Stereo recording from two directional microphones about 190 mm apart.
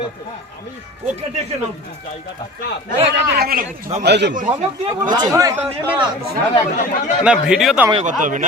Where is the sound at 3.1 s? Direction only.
55° right (ahead or behind).